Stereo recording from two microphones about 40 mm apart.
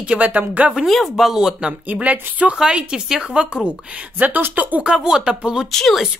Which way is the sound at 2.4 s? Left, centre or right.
Right.